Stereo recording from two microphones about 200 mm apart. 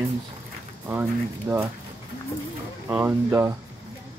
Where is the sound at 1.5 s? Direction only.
10° right (ahead or behind).